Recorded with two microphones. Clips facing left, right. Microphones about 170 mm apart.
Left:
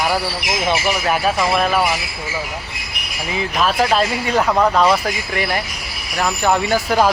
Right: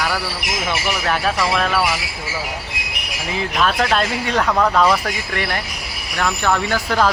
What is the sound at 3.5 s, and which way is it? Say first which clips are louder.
Speech: left 2 dB; 5° left (ahead or behind).